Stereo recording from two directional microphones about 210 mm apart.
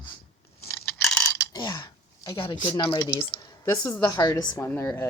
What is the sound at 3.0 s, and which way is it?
Speech, 10° left (ahead or behind).